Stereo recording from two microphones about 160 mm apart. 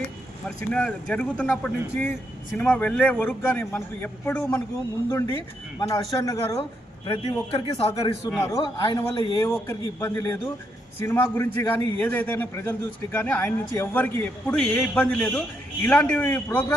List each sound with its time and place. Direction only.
0.4 s a man's voice: 5° left (ahead or behind)
7.1 s a man's voice: 40° left (ahead or behind)
9.5 s a man's voice: 15° left (ahead or behind)